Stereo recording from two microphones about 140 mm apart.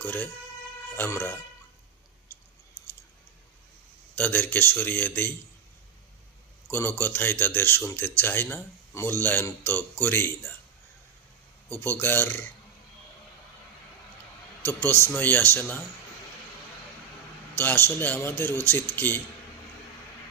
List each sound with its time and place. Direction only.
0.0 s speech: 10° left (ahead or behind)
4.1 s speech: 10° left (ahead or behind)
6.7 s speech: 15° left (ahead or behind)
11.8 s speech: 15° left (ahead or behind)
14.6 s speech: 15° left (ahead or behind)
17.6 s speech: 15° left (ahead or behind)